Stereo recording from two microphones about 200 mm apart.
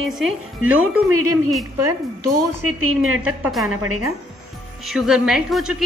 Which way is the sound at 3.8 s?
90° right.